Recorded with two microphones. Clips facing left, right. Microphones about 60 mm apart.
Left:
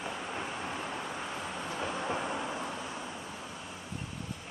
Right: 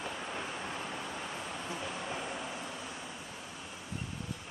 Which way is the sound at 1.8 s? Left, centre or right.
Left.